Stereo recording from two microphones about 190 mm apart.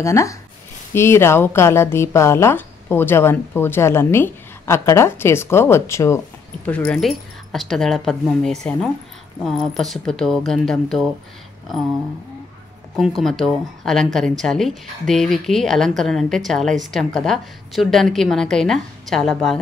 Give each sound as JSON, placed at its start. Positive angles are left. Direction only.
{"t": 0.0, "sound": "speech", "side_deg": 15}
{"t": 12.9, "sound": "speech", "side_deg": 0}